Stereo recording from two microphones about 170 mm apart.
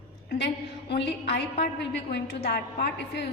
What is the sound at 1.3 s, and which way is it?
A woman's voice, 75° left (ahead or behind).